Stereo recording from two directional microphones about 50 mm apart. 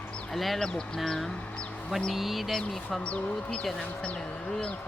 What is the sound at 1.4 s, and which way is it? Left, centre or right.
Speech, left.